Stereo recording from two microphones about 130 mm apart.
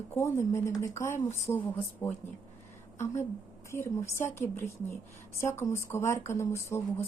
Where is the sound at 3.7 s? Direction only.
20° left (ahead or behind).